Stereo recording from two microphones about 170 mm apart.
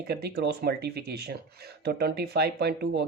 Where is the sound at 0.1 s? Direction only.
70° right (ahead or behind).